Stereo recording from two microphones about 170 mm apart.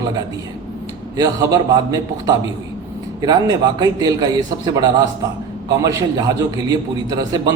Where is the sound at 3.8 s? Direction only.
25° right (ahead or behind).